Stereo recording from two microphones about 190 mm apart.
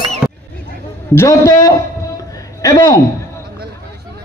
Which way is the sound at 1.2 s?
20° left (ahead or behind).